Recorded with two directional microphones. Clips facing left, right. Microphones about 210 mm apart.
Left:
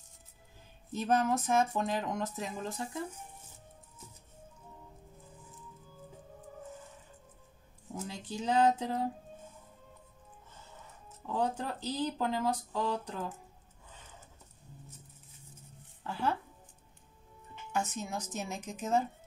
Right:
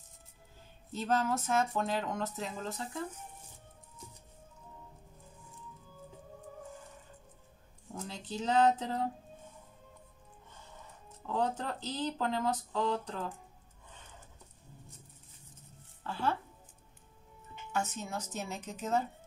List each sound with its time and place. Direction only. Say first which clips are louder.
0.9 s speech: left 2 dB; 15° left (ahead or behind)
7.9 s speech: left 1 dB; 10° left (ahead or behind)
11.2 s speech: even; 10° left (ahead or behind)
16.0 s speech: left 1 dB; 15° left (ahead or behind)
17.7 s speech: left 1 dB; 15° left (ahead or behind)